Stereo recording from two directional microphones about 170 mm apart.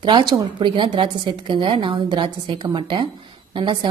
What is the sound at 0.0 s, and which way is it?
Speech, 25° right (ahead or behind).